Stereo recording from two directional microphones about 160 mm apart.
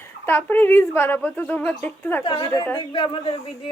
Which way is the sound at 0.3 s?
15° left (ahead or behind).